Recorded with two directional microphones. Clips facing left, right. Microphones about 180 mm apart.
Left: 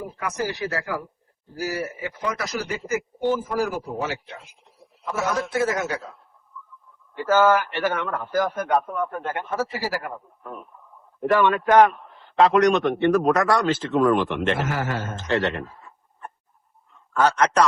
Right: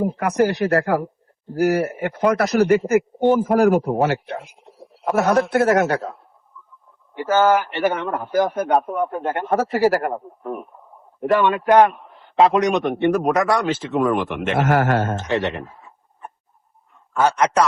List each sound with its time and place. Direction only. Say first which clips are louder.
0.0 s a man's voice: right 10 dB; 55° right (ahead or behind)
7.1 s a man's voice: right 2 dB; 20° right (ahead or behind)
9.5 s a man's voice: right 11 dB; 60° right (ahead or behind)
11.2 s a man's voice: right 2 dB; 20° right (ahead or behind)
13.1 s speech: right 1 dB; centre (ahead or behind)
14.5 s a man's voice: right 8 dB; 65° right (ahead or behind)
15.3 s speech: left 3 dB; 15° right (ahead or behind)
15.6 s a sound: even; centre (ahead or behind)
17.2 s speech: right 2 dB; 10° right (ahead or behind)